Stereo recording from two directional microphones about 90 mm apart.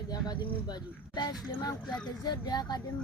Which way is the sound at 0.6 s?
50° left (ahead or behind).